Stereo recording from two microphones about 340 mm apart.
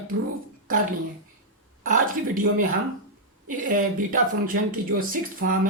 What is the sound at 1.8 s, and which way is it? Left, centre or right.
Speech, right.